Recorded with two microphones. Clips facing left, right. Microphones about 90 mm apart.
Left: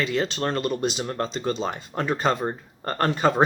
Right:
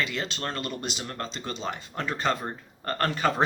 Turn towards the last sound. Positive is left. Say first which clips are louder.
# left 4 dB
turn(degrees=25)  # may be behind; listen again after turning